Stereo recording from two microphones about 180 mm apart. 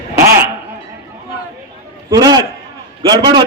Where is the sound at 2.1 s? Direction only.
20° right (ahead or behind).